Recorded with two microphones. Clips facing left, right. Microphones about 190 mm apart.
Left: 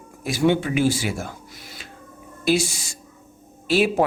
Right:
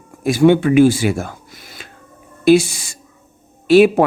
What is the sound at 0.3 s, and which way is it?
Speech, 55° right (ahead or behind).